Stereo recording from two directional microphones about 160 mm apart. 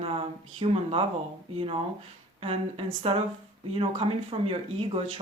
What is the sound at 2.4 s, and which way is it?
Speech, 40° right (ahead or behind).